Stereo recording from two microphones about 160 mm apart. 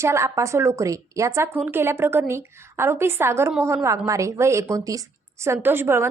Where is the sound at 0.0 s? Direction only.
15° right (ahead or behind).